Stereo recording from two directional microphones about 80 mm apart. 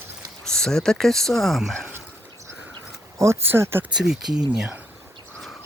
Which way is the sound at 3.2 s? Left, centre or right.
Right.